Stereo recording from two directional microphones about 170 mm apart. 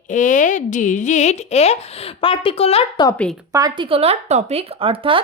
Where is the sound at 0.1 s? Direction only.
50° left (ahead or behind).